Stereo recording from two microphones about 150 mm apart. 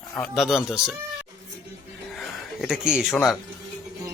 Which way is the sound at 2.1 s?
Centre (ahead or behind).